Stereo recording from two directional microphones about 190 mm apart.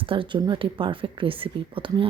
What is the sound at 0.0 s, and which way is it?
Speech, 25° right (ahead or behind).